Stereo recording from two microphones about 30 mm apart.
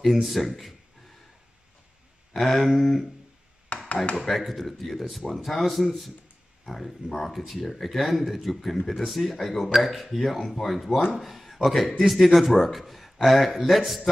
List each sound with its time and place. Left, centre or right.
0.0 s speech: centre
2.3 s speech: centre
3.9 s speech: left
4.2 s speech: centre